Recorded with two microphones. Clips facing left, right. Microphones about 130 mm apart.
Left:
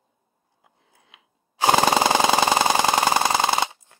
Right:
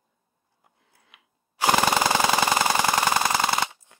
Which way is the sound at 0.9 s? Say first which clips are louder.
Left 3 dB; 15° left (ahead or behind).